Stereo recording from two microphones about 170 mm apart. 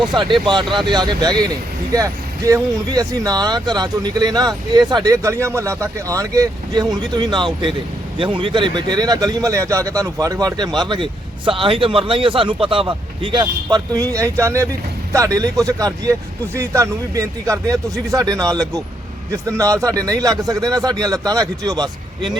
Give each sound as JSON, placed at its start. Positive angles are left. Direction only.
{"t": 0.4, "sound": "speech", "side_deg": -25}